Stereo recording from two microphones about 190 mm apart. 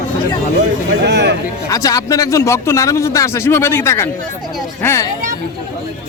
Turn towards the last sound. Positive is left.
turn(degrees=15)  # may be behind; listen again after turning